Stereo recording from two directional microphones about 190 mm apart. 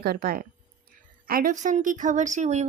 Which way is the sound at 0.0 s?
50° right (ahead or behind).